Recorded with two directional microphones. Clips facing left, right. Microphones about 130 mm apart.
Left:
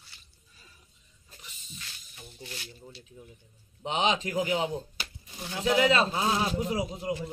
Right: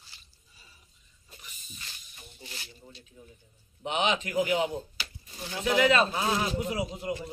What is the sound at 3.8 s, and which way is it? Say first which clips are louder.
Speech: left 1 dB; 30° left (ahead or behind).